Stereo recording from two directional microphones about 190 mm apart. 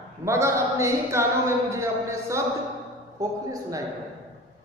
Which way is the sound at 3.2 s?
15° right (ahead or behind).